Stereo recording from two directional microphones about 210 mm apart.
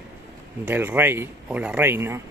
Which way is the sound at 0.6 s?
10° right (ahead or behind).